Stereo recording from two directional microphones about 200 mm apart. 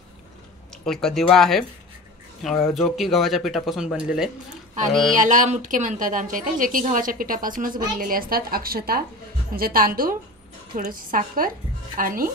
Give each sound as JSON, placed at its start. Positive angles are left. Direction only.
{"t": 0.8, "sound": "speech", "side_deg": 0}
{"t": 2.7, "sound": "speech", "side_deg": 0}
{"t": 5.1, "sound": "a woman's voice", "side_deg": -40}